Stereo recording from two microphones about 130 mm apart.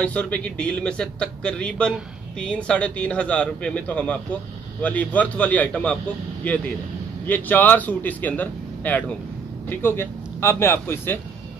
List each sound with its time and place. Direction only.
0.0 s a man's voice: 10° left (ahead or behind)